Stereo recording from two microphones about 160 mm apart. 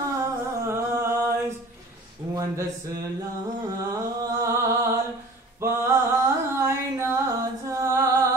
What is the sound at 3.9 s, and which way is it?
Music, 20° right (ahead or behind).